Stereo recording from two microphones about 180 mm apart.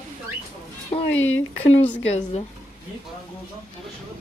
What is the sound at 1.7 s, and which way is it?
Speech, 10° left (ahead or behind).